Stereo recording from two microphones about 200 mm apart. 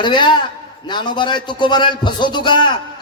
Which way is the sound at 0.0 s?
25° left (ahead or behind).